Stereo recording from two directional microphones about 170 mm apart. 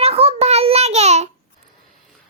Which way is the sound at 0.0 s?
35° right (ahead or behind).